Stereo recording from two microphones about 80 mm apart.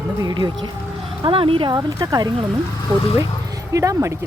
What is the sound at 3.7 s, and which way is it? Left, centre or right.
Speech, right.